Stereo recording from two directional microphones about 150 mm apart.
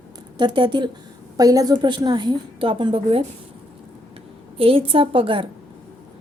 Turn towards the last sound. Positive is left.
turn(degrees=-35)  # may be behind; listen again after turning